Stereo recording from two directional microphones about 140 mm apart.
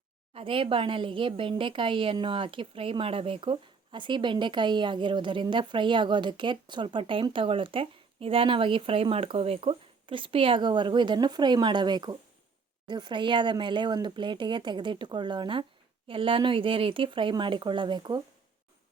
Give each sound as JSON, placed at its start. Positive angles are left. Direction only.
{"t": 0.3, "sound": "a woman's voice", "side_deg": -40}